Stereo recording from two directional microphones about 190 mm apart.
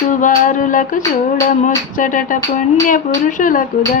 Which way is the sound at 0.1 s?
45° left (ahead or behind).